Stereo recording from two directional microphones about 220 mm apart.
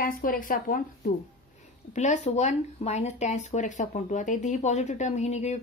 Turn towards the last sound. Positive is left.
turn(degrees=30)  # may be behind; listen again after turning